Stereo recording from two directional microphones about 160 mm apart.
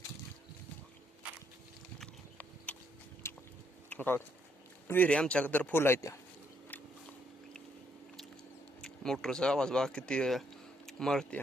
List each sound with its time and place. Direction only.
2.7 s a sound: 10° left (ahead or behind)
4.9 s speech: 10° left (ahead or behind)
8.8 s speech: 5° left (ahead or behind)